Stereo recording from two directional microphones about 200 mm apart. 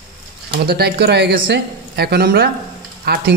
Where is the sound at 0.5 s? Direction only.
55° right (ahead or behind).